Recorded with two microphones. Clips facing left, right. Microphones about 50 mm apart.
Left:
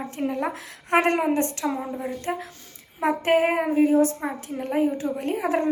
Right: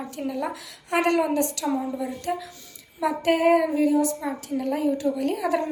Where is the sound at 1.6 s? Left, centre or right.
Centre.